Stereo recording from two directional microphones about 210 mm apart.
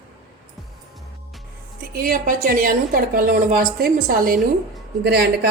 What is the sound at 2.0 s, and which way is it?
A woman's voice, 40° right (ahead or behind).